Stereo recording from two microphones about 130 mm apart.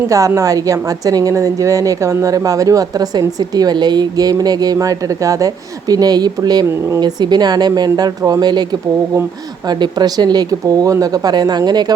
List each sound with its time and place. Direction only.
0.1 s a woman's voice: 25° right (ahead or behind)
9.6 s speech: 35° right (ahead or behind)